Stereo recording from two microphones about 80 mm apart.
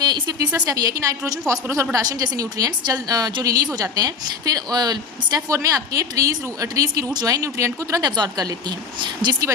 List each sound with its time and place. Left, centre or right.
0.0 s a sound: right
0.6 s a woman's voice: right
5.5 s a woman's voice: right
8.1 s speech: right
9.0 s speech: right